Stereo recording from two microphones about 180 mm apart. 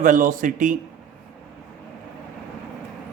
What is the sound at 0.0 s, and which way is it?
Speech, 50° right (ahead or behind).